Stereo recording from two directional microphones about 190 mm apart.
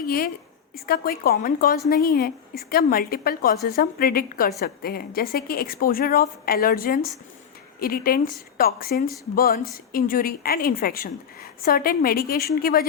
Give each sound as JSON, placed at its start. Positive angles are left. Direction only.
{"t": 0.0, "sound": "a woman's voice", "side_deg": 50}